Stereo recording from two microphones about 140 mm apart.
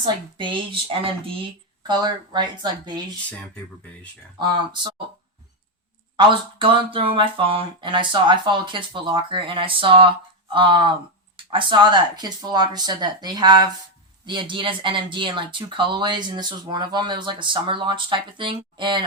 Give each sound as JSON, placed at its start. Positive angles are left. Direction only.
{"t": 0.0, "sound": "speech", "side_deg": -35}
{"t": 4.4, "sound": "speech", "side_deg": -30}
{"t": 6.1, "sound": "speech", "side_deg": -35}